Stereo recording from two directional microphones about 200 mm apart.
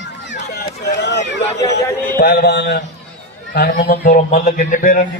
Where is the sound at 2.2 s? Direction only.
50° left (ahead or behind).